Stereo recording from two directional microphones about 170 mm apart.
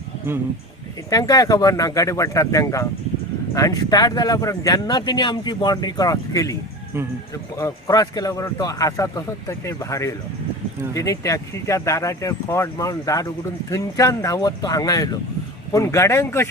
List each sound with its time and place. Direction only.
1.1 s speech: 20° left (ahead or behind)